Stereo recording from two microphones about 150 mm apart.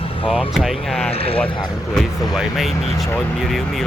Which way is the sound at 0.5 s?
Centre (ahead or behind).